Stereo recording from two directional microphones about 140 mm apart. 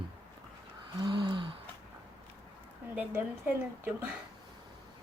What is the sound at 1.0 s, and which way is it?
Gasp, 30° right (ahead or behind).